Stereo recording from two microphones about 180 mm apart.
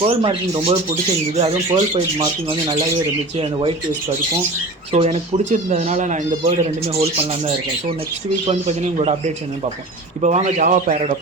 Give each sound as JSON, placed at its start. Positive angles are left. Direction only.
{"t": 0.0, "sound": "speech", "side_deg": -30}
{"t": 2.1, "sound": "speech", "side_deg": -25}
{"t": 4.9, "sound": "a man's voice", "side_deg": -35}